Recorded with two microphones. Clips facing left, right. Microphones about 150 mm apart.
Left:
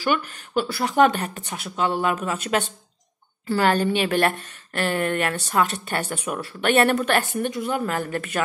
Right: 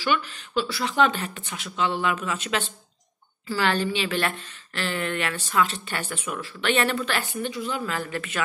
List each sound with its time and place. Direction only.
0.0 s speech: 50° left (ahead or behind)
3.6 s speech: 45° left (ahead or behind)